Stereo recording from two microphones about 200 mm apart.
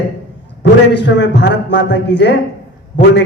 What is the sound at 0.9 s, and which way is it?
A man's voice, 60° left (ahead or behind).